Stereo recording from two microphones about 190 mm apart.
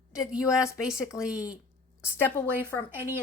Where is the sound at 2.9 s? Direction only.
10° right (ahead or behind).